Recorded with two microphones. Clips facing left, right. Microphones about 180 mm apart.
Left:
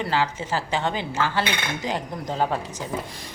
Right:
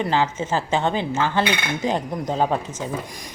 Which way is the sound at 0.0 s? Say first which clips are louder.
Right 3 dB; 20° right (ahead or behind).